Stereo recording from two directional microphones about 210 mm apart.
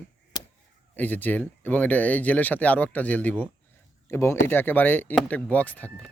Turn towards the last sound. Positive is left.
turn(degrees=5)  # may be behind; listen again after turning